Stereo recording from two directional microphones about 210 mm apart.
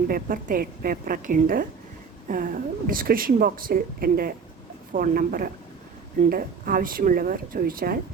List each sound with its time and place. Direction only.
0.1 s a woman's voice: 40° right (ahead or behind)